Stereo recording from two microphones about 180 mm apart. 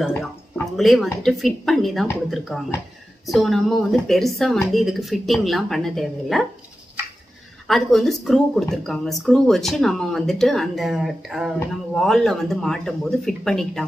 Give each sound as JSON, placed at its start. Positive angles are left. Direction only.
{"t": 0.7, "sound": "speech", "side_deg": 0}
{"t": 7.6, "sound": "speech", "side_deg": 0}